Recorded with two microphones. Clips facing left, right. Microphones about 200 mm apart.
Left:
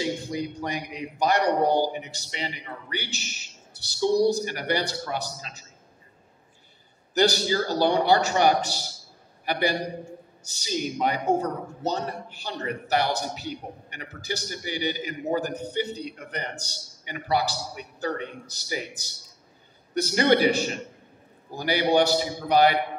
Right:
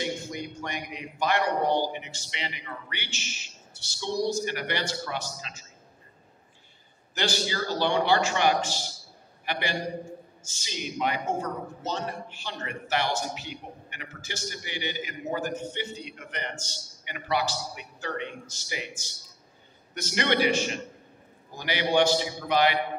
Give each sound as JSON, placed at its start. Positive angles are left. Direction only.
{"t": 0.3, "sound": "a man's voice", "side_deg": 35}
{"t": 7.2, "sound": "a man's voice", "side_deg": 40}